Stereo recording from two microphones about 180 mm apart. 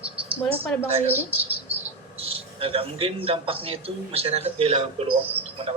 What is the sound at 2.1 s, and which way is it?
A man's voice, 30° right (ahead or behind).